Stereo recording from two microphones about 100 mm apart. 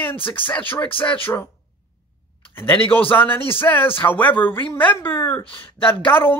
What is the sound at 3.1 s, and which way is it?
Speech, 20° left (ahead or behind).